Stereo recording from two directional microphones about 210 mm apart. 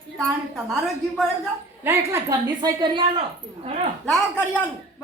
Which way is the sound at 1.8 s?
10° right (ahead or behind).